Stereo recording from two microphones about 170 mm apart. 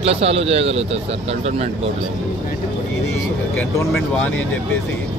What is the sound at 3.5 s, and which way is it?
Speech, 10° left (ahead or behind).